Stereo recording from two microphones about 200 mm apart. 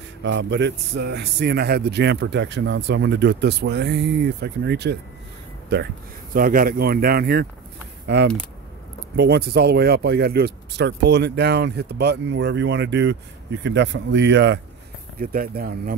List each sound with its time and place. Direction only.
0.2 s speech: 65° right (ahead or behind)
6.3 s speech: 45° right (ahead or behind)
9.1 s speech: 55° right (ahead or behind)
15.1 s speech: 45° right (ahead or behind)